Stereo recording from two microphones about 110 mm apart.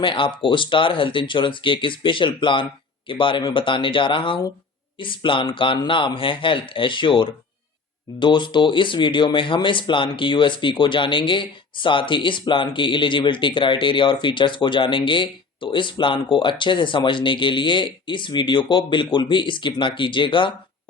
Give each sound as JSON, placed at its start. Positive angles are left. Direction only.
{"t": 0.0, "sound": "speech", "side_deg": 50}